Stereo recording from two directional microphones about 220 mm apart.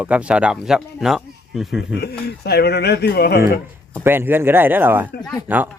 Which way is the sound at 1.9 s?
45° left (ahead or behind).